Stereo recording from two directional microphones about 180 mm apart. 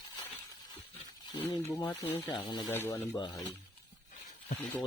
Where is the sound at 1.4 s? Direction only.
20° left (ahead or behind).